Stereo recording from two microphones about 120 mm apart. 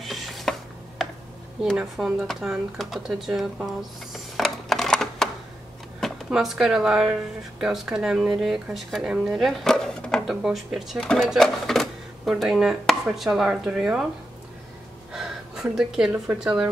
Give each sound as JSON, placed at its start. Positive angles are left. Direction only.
{"t": 0.0, "sound": "chopping", "side_deg": 0}
{"t": 1.6, "sound": "speech", "side_deg": -5}
{"t": 15.1, "sound": "a sound", "side_deg": -5}
{"t": 16.3, "sound": "speech", "side_deg": -5}